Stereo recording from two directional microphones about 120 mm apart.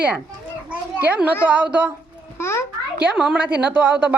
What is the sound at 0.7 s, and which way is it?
A child's voice, 15° right (ahead or behind).